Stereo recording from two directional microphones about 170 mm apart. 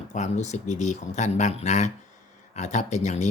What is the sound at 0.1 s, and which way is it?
Speech, 45° left (ahead or behind).